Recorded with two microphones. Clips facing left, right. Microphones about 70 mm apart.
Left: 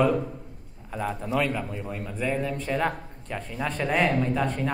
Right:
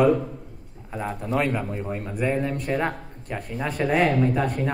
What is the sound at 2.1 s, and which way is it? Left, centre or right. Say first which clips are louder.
A man's voice: right 3 dB; centre.